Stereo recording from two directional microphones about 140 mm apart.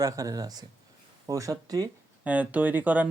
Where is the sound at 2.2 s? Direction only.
10° right (ahead or behind).